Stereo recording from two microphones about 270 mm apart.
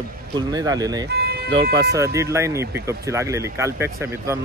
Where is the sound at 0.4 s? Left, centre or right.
Centre.